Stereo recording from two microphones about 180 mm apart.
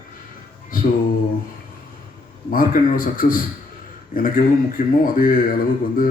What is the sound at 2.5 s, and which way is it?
A man's voice, 50° left (ahead or behind).